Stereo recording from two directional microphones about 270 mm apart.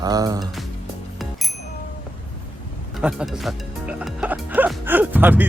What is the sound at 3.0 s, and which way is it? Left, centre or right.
Speech, centre.